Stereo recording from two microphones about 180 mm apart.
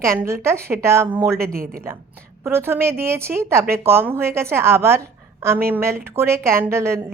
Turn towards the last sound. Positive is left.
turn(degrees=-15)  # may be behind; listen again after turning